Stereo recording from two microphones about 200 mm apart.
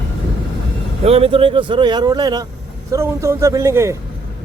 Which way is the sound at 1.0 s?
30° right (ahead or behind).